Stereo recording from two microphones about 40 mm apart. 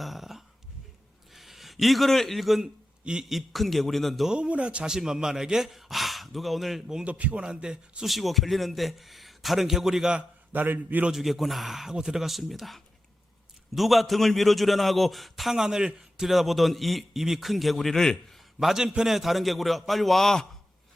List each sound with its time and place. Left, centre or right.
0.0 s a sound: centre
1.3 s speech: centre
3.0 s a man's voice: right
3.2 s a man's voice: centre
4.4 s speech: right
4.9 s a man's voice: centre
7.0 s speech: right
7.4 s a man's voice: right
8.0 s a man's voice: centre
10.5 s a man's voice: right
11.1 s a man's voice: centre
15.5 s a man's voice: centre
18.6 s a man's voice: centre